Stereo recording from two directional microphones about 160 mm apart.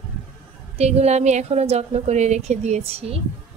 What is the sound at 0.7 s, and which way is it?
A woman's voice, 40° right (ahead or behind).